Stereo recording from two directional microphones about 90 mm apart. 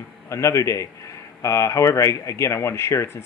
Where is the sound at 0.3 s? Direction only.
35° left (ahead or behind).